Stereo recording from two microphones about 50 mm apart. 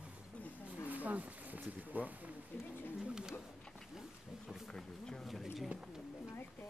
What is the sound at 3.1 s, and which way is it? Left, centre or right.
Bird, centre.